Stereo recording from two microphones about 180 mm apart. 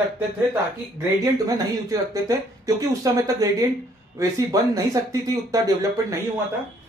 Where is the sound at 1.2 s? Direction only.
20° right (ahead or behind).